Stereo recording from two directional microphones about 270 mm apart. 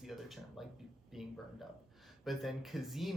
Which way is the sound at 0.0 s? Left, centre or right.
Centre.